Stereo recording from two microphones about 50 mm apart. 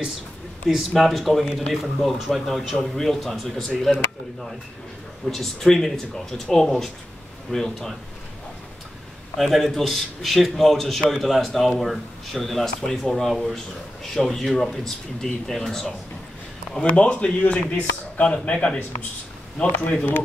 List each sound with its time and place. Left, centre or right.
0.7 s a man's voice: centre
5.3 s speech: centre
9.4 s a man's voice: centre
16.7 s a man's voice: left